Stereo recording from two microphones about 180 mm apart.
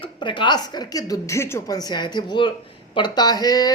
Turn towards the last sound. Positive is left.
turn(degrees=20)  # may be behind; listen again after turning